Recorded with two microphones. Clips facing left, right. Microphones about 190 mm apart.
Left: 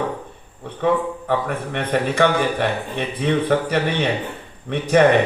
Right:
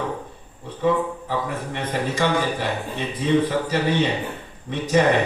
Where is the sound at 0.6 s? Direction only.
60° left (ahead or behind).